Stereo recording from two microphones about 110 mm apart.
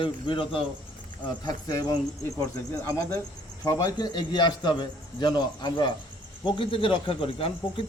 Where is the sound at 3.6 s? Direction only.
40° left (ahead or behind).